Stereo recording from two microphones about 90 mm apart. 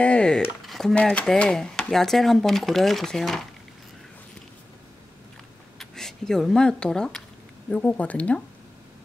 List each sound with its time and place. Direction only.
0.0 s speech: 10° left (ahead or behind)
0.7 s a sound: centre (ahead or behind)
0.9 s speech: 10° left (ahead or behind)
5.8 s speech: 5° left (ahead or behind)
7.7 s speech: 20° left (ahead or behind)